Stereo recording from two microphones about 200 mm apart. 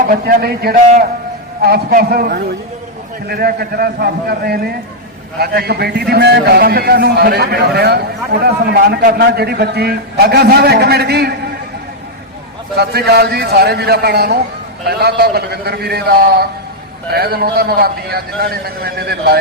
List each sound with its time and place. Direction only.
0.0 s a man's voice: 45° right (ahead or behind)
12.7 s a man's voice: 55° right (ahead or behind)